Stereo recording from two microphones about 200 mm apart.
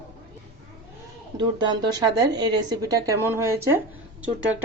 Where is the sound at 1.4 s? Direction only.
20° right (ahead or behind).